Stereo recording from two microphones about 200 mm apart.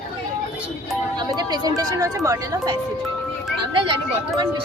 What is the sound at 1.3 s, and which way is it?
Speech, 20° right (ahead or behind).